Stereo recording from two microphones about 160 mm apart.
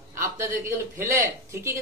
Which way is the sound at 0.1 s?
15° right (ahead or behind).